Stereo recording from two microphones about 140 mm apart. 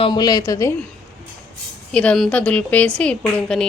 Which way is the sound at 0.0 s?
30° left (ahead or behind).